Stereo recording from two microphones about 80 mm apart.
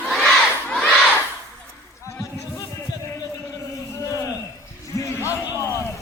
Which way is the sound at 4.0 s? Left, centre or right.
Left.